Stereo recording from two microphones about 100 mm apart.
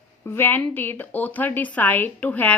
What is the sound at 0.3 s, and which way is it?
A woman's voice, 20° left (ahead or behind).